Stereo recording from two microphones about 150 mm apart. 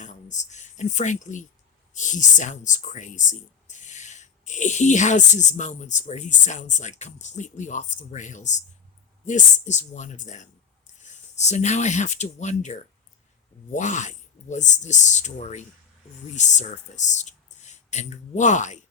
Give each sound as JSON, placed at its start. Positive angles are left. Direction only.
{"t": 0.0, "sound": "speech", "side_deg": 55}
{"t": 13.7, "sound": "speech", "side_deg": 55}